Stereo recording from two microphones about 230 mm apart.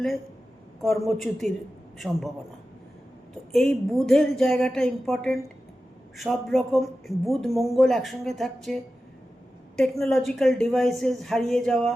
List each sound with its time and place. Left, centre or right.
0.8 s speech: centre
3.5 s speech: centre